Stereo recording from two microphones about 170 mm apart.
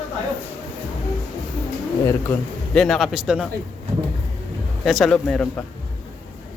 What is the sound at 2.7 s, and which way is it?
Speech, centre (ahead or behind).